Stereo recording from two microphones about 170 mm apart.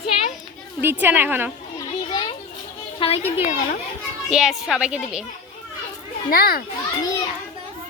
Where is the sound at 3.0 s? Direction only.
30° left (ahead or behind).